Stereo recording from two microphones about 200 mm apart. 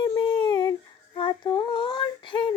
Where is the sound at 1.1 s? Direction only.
25° left (ahead or behind).